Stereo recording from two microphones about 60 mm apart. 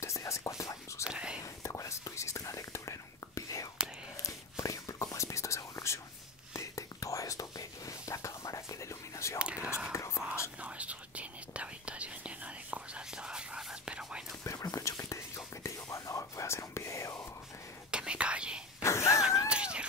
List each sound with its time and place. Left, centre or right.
0.0 s whispering: left
1.0 s whispering: centre
1.4 s whispering: left
9.4 s whispering: centre
9.9 s whispering: left
10.6 s whispering: right
14.4 s whispering: left
17.9 s whispering: centre
18.8 s a sound: left
19.5 s a sound: centre